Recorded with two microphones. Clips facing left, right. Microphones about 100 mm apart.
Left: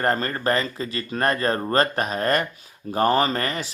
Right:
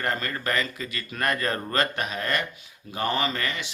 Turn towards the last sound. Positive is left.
turn(degrees=40)  # may be behind; listen again after turning